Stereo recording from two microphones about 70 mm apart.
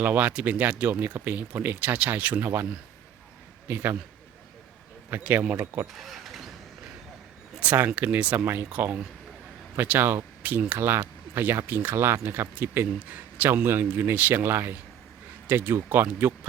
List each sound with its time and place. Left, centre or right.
0.0 s speech: right
5.2 s speech: right
5.9 s a sound: centre
7.6 s speech: right